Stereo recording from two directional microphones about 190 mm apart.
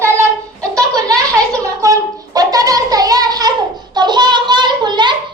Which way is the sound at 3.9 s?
25° right (ahead or behind).